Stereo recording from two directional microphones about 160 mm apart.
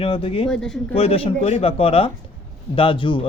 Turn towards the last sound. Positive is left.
turn(degrees=30)  # may be behind; listen again after turning